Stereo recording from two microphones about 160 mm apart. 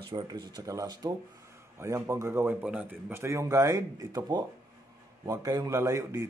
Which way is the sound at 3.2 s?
20° right (ahead or behind).